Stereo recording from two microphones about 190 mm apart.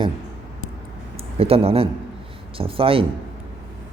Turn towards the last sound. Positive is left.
turn(degrees=-30)  # may be behind; listen again after turning